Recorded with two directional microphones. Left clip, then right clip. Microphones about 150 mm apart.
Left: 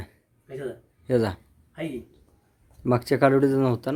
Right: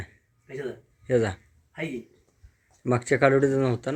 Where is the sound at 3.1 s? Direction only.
25° left (ahead or behind).